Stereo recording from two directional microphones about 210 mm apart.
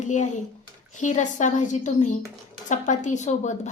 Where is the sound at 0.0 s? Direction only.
35° left (ahead or behind).